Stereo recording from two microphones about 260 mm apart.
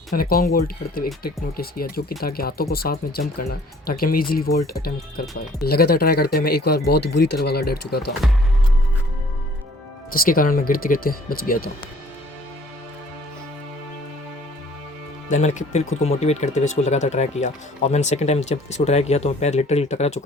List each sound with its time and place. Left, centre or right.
0.1 s speech: left
8.2 s speech: centre
10.1 s speech: left
15.3 s speech: left